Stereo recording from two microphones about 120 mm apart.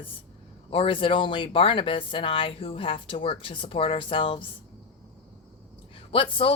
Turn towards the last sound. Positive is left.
turn(degrees=45)  # may be behind; listen again after turning